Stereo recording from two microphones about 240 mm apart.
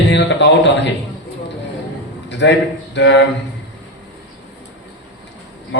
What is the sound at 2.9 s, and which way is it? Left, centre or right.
Speech, left.